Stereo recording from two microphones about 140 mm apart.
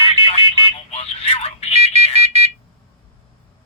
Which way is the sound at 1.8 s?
50° right (ahead or behind).